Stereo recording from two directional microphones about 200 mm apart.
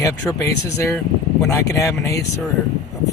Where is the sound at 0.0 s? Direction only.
15° left (ahead or behind).